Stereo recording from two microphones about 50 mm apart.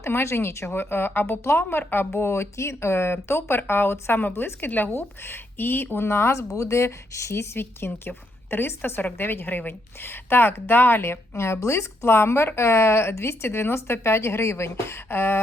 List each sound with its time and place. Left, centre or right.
0.0 s a woman's voice: left
2.0 s a woman's voice: left
7.5 s a woman's voice: left